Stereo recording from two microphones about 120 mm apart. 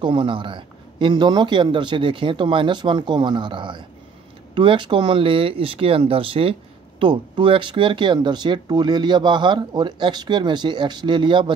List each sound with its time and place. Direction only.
0.0 s speech: 45° right (ahead or behind)